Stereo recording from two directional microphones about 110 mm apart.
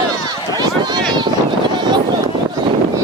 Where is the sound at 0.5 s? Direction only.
40° right (ahead or behind).